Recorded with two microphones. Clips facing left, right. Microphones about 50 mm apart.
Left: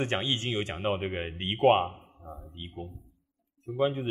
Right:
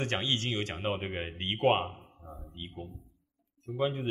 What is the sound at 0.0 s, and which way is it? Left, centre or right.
Speech, centre.